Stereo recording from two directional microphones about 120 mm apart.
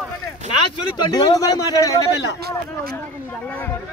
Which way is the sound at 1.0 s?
35° left (ahead or behind).